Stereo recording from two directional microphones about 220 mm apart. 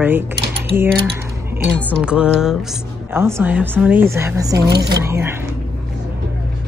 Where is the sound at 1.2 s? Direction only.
10° right (ahead or behind).